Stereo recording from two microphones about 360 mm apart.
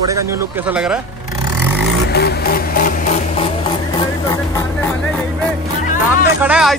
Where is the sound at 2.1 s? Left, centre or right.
Left.